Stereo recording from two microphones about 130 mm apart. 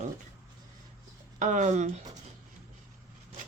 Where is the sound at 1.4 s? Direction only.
70° right (ahead or behind).